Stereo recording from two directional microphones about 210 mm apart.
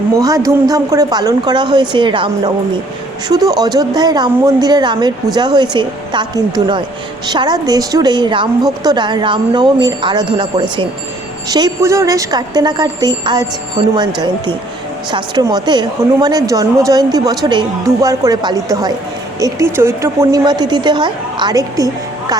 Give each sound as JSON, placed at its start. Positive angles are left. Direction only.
{"t": 0.2, "sound": "a woman's voice", "side_deg": -15}
{"t": 15.1, "sound": "a woman's voice", "side_deg": -20}